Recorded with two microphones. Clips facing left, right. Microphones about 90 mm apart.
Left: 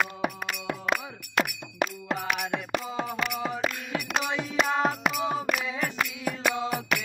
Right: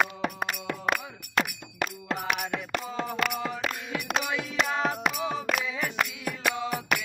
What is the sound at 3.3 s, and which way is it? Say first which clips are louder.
Music: left 2 dB; 15° left (ahead or behind).